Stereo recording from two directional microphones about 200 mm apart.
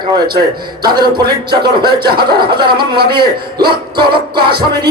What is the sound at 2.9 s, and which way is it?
Music, 50° right (ahead or behind).